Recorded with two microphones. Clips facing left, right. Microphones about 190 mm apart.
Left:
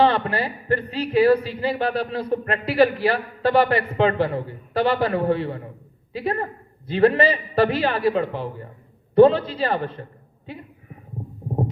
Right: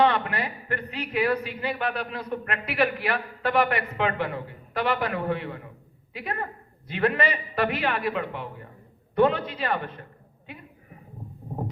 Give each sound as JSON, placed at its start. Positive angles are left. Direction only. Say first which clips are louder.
{"t": 0.0, "sound": "a man's voice", "louder": "left 4 dB", "side_deg": 30}